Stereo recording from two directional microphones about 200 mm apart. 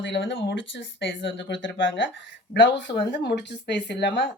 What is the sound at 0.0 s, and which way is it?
Speech, 65° left (ahead or behind).